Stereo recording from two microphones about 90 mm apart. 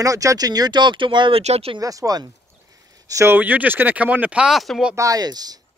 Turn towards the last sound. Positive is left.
turn(degrees=-45)  # may be behind; listen again after turning